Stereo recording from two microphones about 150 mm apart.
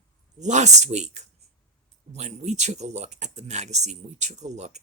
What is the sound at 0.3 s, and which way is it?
Speech, 50° right (ahead or behind).